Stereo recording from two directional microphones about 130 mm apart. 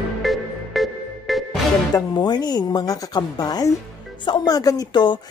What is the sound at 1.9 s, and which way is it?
A woman's voice, 35° left (ahead or behind).